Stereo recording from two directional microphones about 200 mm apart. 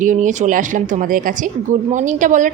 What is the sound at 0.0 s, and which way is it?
A woman's voice, 40° right (ahead or behind).